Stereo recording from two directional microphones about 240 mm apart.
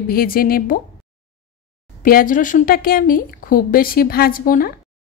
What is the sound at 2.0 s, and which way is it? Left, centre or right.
Speech, left.